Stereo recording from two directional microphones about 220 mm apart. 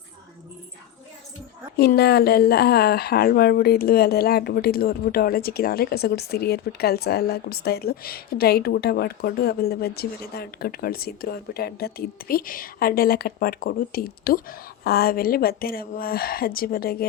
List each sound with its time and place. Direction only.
1.7 s speech: 45° left (ahead or behind)